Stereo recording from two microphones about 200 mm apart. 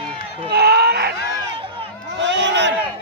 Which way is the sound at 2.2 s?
60° right (ahead or behind).